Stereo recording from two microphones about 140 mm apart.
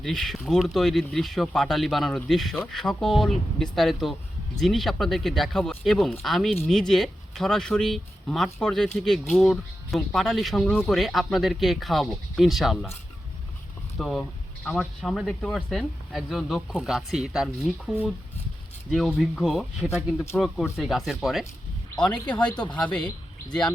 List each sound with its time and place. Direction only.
0.0 s speech: centre (ahead or behind)
14.0 s speech: 5° left (ahead or behind)
22.5 s speech: 30° left (ahead or behind)
22.8 s speech: 5° left (ahead or behind)